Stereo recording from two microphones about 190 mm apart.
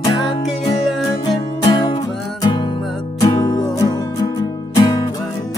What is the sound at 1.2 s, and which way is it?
Music, 25° left (ahead or behind).